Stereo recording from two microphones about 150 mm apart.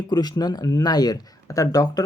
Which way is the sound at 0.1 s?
25° left (ahead or behind).